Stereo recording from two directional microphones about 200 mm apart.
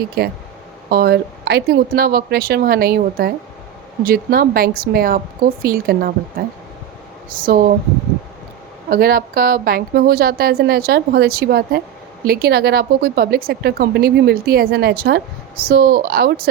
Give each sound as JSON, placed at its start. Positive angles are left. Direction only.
{"t": 0.2, "sound": "speech", "side_deg": -50}
{"t": 7.3, "sound": "speech", "side_deg": -45}
{"t": 8.9, "sound": "speech", "side_deg": -50}